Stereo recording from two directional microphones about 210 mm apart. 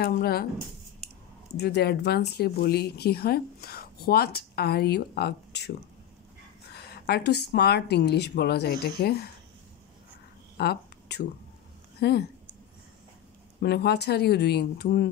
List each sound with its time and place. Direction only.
0.0 s speech: 50° left (ahead or behind)
1.5 s speech: 50° left (ahead or behind)
6.7 s speech: 50° left (ahead or behind)
10.6 s a sound: 50° left (ahead or behind)
12.0 s speech: 50° left (ahead or behind)
13.6 s speech: 50° left (ahead or behind)